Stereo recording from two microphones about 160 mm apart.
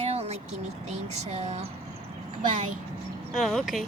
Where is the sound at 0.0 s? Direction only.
40° right (ahead or behind).